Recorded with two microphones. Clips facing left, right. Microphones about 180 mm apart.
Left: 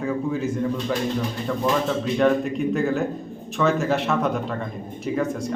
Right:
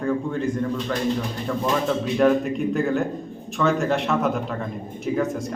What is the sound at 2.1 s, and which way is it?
A man's voice, centre (ahead or behind).